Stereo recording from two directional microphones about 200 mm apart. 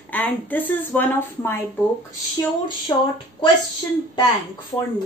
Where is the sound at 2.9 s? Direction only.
15° left (ahead or behind).